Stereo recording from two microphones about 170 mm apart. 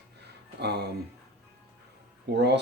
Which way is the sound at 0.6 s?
75° right (ahead or behind).